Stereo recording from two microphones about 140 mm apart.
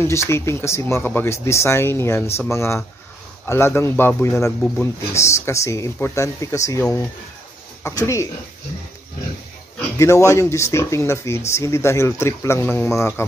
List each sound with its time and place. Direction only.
0.0 s a man's voice: 20° left (ahead or behind)
4.5 s a man's voice: 5° left (ahead or behind)
5.1 s speech: 20° left (ahead or behind)
9.9 s speech: 20° left (ahead or behind)